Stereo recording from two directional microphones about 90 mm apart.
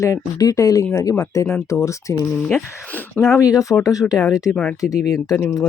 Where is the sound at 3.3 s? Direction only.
40° left (ahead or behind).